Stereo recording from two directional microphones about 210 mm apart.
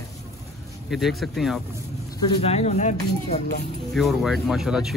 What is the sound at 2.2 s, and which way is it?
Speech, 25° left (ahead or behind).